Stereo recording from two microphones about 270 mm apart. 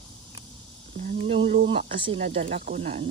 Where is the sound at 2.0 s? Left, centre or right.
Centre.